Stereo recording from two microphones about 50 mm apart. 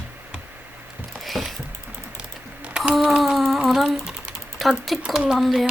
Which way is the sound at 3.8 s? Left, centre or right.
Centre.